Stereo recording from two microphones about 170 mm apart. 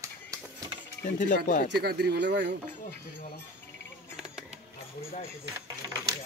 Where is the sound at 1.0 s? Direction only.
50° left (ahead or behind).